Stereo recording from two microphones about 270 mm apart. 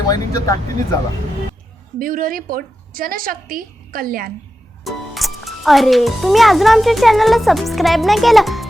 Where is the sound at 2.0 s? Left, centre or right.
Right.